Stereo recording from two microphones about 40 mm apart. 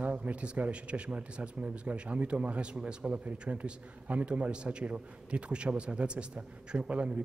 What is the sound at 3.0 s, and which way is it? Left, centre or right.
A man's voice, right.